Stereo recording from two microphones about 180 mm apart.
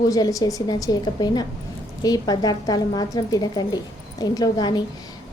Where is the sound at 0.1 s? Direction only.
20° left (ahead or behind).